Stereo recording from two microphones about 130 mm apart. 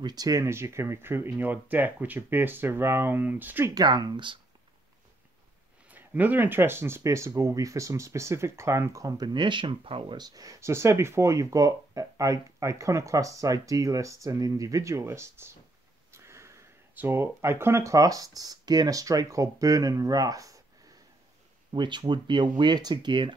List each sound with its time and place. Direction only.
0.0 s speech: 30° right (ahead or behind)
3.7 s speech: 30° right (ahead or behind)
5.9 s speech: 10° right (ahead or behind)
21.7 s speech: 35° right (ahead or behind)